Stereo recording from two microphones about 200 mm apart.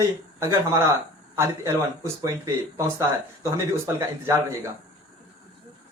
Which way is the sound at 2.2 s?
15° right (ahead or behind).